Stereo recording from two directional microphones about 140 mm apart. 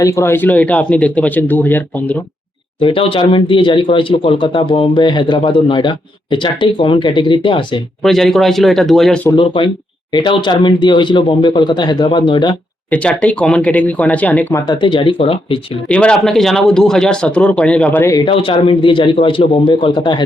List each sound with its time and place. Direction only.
0.0 s speech: 20° left (ahead or behind)
2.8 s speech: 40° left (ahead or behind)
8.0 s speech: centre (ahead or behind)
9.3 s speech: 40° left (ahead or behind)
12.9 s speech: 10° left (ahead or behind)
14.7 s speech: 35° left (ahead or behind)
15.9 s speech: 5° left (ahead or behind)
18.1 s speech: 35° left (ahead or behind)